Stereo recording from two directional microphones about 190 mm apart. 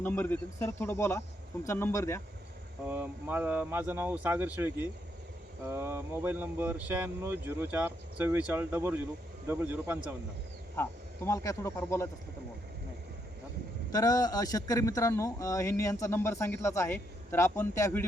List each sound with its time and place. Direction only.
0.0 s speech: 10° left (ahead or behind)
2.8 s speech: 10° right (ahead or behind)
11.3 s speech: 15° left (ahead or behind)
13.9 s speech: 20° left (ahead or behind)